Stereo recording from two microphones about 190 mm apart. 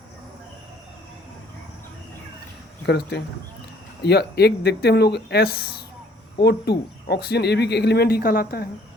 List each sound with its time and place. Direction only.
2.8 s speech: 60° left (ahead or behind)